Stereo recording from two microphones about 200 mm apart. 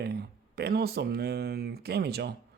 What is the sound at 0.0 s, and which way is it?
Speech, 50° right (ahead or behind).